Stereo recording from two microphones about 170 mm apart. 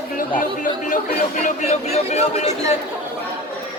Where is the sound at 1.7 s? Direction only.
40° left (ahead or behind).